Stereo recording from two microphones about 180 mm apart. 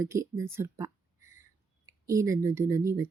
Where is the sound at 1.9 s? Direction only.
15° right (ahead or behind).